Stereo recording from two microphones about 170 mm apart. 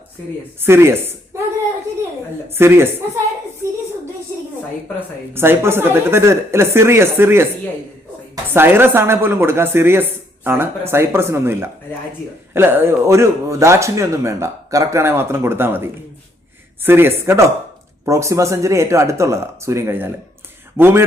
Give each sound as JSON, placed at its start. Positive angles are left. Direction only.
{"t": 0.6, "sound": "speech", "side_deg": -15}
{"t": 2.5, "sound": "speech", "side_deg": -15}
{"t": 5.3, "sound": "speech", "side_deg": -15}
{"t": 8.5, "sound": "speech", "side_deg": -15}